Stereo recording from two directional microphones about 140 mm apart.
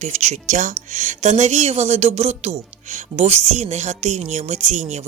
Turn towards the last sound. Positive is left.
turn(degrees=-55)  # may be behind; listen again after turning